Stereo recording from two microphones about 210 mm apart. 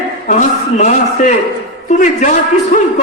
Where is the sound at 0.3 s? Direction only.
35° left (ahead or behind).